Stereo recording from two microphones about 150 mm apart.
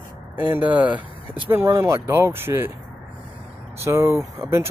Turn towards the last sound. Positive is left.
turn(degrees=-20)  # may be behind; listen again after turning